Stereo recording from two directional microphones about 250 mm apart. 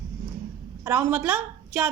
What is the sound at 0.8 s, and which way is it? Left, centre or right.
A woman's voice, centre.